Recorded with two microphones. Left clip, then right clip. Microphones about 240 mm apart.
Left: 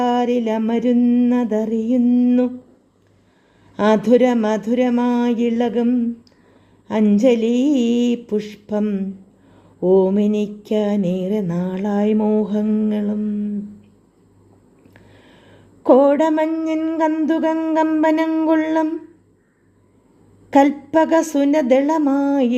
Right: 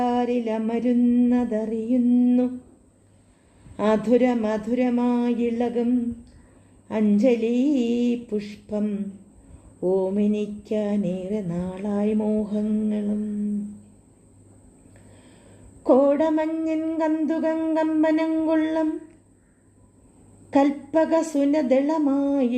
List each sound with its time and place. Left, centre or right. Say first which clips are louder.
0.0 s mantra: left 5 dB; left
3.8 s mantra: left 6 dB; left
15.8 s mantra: left 5 dB; left
20.5 s mantra: left 6 dB; left